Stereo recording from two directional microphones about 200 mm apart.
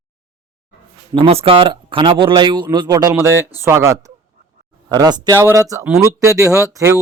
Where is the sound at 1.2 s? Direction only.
30° right (ahead or behind).